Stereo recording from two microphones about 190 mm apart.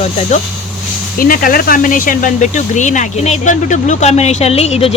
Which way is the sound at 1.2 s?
50° left (ahead or behind).